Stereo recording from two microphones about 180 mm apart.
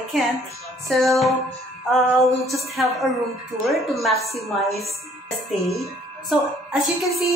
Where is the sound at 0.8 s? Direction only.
Centre (ahead or behind).